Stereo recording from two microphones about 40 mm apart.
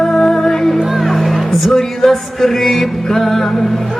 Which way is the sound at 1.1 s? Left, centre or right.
Centre.